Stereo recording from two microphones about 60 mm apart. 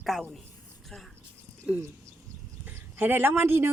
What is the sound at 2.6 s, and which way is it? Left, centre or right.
Speech, right.